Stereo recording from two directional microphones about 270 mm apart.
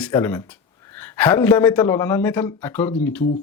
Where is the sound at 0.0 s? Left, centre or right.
Centre.